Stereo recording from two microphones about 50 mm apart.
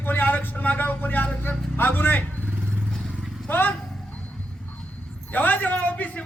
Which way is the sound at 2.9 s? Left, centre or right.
Centre.